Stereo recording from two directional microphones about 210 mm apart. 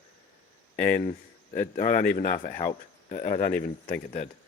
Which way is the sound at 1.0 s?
30° left (ahead or behind).